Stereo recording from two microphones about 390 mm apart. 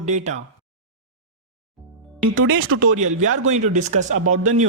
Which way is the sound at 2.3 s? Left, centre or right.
Right.